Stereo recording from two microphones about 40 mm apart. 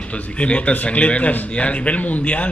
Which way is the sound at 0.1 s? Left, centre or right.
Left.